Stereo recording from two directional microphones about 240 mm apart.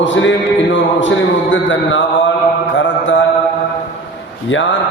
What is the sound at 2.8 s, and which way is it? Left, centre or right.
Mantra, left.